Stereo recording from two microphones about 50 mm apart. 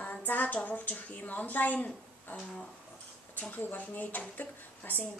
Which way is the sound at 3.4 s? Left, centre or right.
Left.